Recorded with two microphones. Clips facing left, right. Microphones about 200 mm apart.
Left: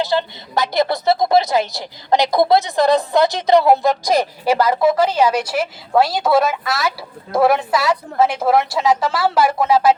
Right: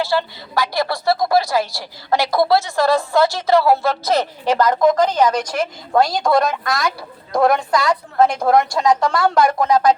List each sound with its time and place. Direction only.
0.0 s a woman's voice: 20° left (ahead or behind)